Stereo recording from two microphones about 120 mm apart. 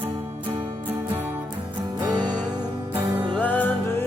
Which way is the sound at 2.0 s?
35° right (ahead or behind).